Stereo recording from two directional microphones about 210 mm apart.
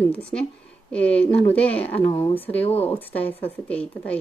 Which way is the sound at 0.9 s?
5° left (ahead or behind).